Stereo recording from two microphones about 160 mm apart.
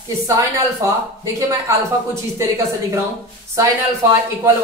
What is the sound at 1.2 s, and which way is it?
A man's voice, 20° right (ahead or behind).